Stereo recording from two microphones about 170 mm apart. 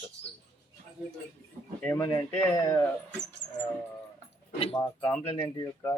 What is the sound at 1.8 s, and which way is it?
Speech, 20° left (ahead or behind).